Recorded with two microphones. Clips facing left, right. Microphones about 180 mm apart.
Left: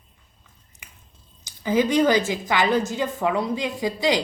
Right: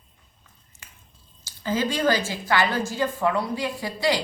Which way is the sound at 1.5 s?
15° left (ahead or behind).